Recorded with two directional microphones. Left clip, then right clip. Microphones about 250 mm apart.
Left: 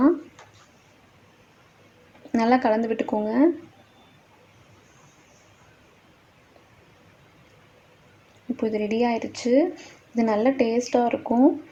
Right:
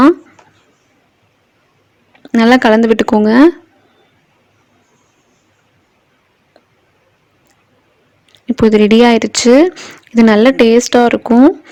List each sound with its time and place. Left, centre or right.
2.3 s speech: right
8.5 s speech: right